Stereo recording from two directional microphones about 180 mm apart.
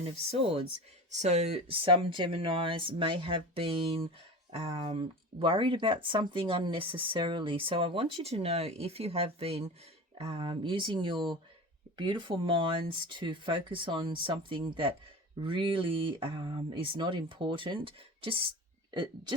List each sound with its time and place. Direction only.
1.2 s speech: 40° right (ahead or behind)